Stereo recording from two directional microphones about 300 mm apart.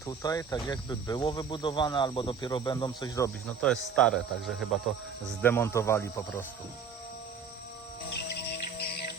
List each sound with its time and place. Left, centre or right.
0.0 s cricket: centre
3.9 s speech: centre
5.4 s cricket: centre
8.3 s music: left